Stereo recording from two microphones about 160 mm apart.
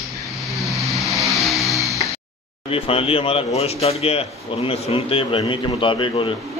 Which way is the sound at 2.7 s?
35° left (ahead or behind).